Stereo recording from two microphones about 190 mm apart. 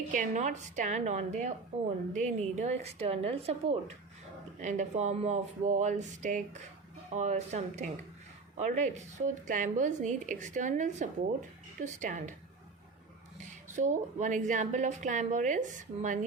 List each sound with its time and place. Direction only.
0.1 s a woman's voice: 40° right (ahead or behind)
4.6 s a woman's voice: 40° right (ahead or behind)
13.7 s a woman's voice: 40° right (ahead or behind)